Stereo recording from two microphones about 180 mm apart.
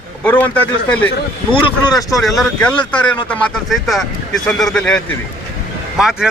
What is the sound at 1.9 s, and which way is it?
Speech, 20° left (ahead or behind).